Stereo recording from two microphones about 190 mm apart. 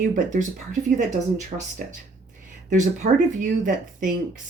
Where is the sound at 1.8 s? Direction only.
50° right (ahead or behind).